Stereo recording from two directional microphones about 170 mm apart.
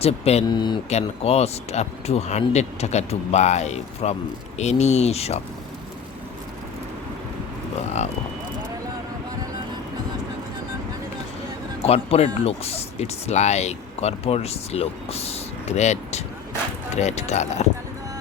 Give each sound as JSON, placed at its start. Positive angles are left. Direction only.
{"t": 0.0, "sound": "speech", "side_deg": 40}
{"t": 0.4, "sound": "speech", "side_deg": 25}
{"t": 0.9, "sound": "speech", "side_deg": 40}
{"t": 11.8, "sound": "speech", "side_deg": 35}